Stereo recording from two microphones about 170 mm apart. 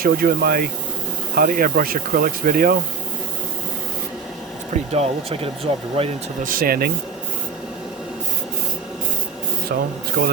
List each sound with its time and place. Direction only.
0.0 s speech: 60° right (ahead or behind)
4.7 s speech: 35° right (ahead or behind)
6.4 s speech: 55° right (ahead or behind)
9.7 s speech: 55° right (ahead or behind)